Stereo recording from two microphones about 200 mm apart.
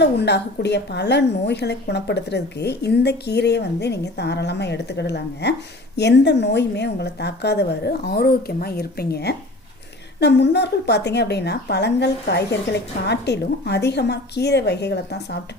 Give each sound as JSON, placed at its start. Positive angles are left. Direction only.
{"t": 0.0, "sound": "a woman's voice", "side_deg": 55}